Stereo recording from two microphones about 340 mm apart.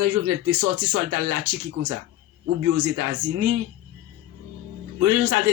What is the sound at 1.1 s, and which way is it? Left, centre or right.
Speech, right.